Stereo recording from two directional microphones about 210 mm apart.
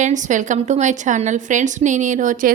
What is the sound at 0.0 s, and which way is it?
A woman's voice, 35° right (ahead or behind).